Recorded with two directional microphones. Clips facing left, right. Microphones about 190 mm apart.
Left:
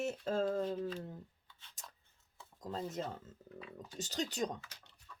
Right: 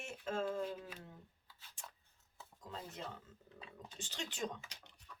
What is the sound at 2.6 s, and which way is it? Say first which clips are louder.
Speech: left 8 dB; 40° left (ahead or behind).